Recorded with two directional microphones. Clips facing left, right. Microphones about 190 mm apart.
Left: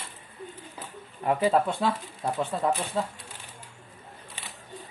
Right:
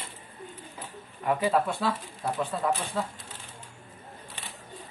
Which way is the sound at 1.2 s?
25° left (ahead or behind).